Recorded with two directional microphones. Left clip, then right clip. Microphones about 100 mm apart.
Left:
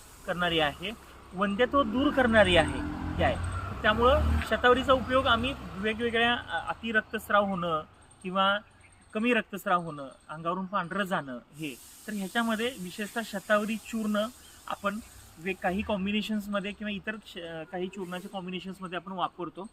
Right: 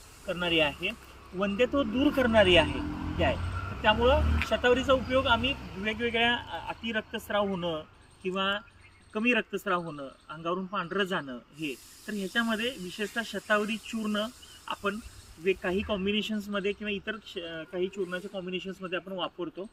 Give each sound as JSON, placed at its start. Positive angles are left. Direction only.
{"t": 0.3, "sound": "speech", "side_deg": 40}
{"t": 2.8, "sound": "vehicle", "side_deg": 0}
{"t": 3.8, "sound": "speech", "side_deg": 35}